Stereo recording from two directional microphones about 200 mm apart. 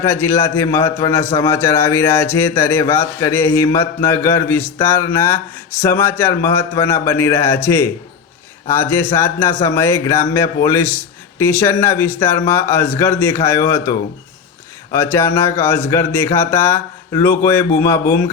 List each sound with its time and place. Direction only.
0.0 s speech: 10° left (ahead or behind)
14.9 s speech: 10° left (ahead or behind)